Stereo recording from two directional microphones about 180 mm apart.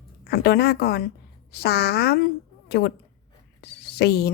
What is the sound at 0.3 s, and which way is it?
A woman's voice, 60° left (ahead or behind).